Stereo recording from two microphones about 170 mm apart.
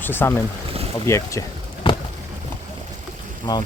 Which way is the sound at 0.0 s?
10° left (ahead or behind).